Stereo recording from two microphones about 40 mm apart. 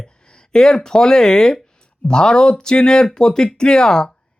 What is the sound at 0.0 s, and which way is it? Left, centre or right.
Speech, left.